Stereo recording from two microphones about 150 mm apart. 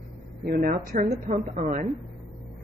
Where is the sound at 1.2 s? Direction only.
50° right (ahead or behind).